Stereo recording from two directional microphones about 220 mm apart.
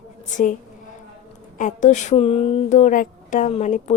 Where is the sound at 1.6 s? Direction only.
35° left (ahead or behind).